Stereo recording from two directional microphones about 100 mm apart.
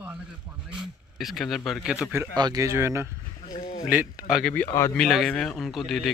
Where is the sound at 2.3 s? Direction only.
45° right (ahead or behind).